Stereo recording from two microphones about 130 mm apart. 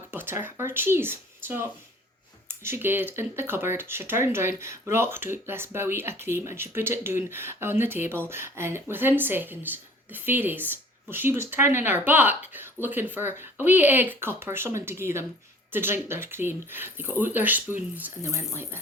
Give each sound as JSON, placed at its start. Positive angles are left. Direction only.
{"t": 0.1, "sound": "speech", "side_deg": -15}